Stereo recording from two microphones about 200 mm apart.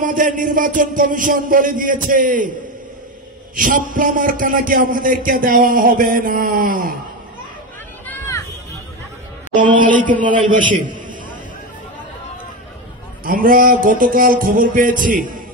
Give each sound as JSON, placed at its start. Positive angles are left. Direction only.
{"t": 0.0, "sound": "a man's voice", "side_deg": -40}
{"t": 3.5, "sound": "a man's voice", "side_deg": -40}
{"t": 9.6, "sound": "a man's voice", "side_deg": -40}
{"t": 13.2, "sound": "a man's voice", "side_deg": -45}